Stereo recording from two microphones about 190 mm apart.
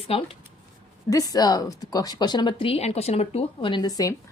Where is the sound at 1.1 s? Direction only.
20° left (ahead or behind).